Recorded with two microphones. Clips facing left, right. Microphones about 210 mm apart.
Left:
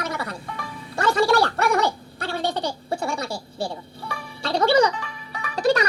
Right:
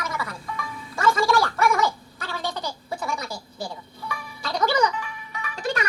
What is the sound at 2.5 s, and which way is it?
Music, 30° left (ahead or behind).